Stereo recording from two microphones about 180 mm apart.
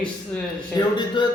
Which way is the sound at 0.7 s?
25° left (ahead or behind).